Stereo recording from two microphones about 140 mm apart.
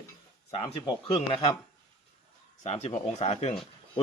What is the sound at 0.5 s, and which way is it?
Speech, 35° left (ahead or behind).